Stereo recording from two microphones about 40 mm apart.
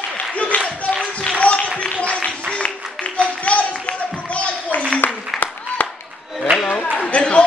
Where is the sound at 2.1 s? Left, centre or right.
Left.